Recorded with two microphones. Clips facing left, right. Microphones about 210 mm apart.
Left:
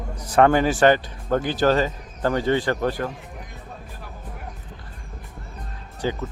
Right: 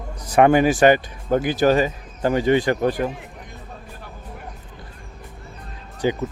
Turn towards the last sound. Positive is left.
turn(degrees=-15)  # may be behind; listen again after turning